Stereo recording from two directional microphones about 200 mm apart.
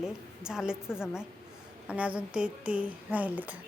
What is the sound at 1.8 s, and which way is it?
Speech, 5° right (ahead or behind).